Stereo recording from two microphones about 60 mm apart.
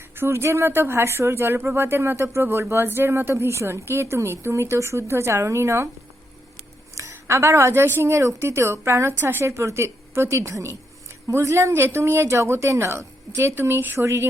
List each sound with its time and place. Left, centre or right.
0.2 s a woman's voice: right
7.3 s a woman's voice: right
13.6 s a woman's voice: right